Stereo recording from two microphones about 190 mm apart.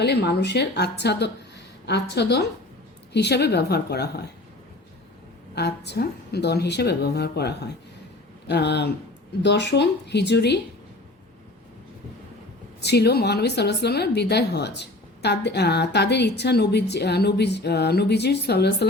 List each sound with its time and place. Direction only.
0.0 s speech: 60° left (ahead or behind)
5.5 s speech: 60° left (ahead or behind)
12.8 s speech: 60° left (ahead or behind)